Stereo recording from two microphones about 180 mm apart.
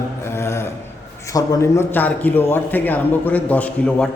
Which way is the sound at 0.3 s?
15° left (ahead or behind).